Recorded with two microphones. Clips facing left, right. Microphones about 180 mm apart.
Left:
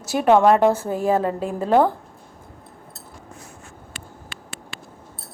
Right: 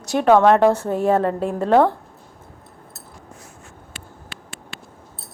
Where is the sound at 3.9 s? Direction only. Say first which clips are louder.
Right 1 dB; 45° left (ahead or behind).